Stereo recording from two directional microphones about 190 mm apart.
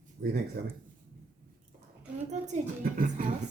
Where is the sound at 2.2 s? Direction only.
40° right (ahead or behind).